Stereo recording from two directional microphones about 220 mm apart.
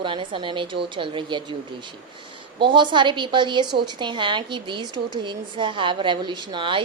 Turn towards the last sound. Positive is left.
turn(degrees=-20)  # may be behind; listen again after turning